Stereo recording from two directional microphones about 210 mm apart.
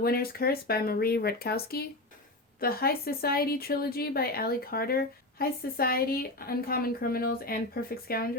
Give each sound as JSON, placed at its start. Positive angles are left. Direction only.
{"t": 0.0, "sound": "a woman's voice", "side_deg": 45}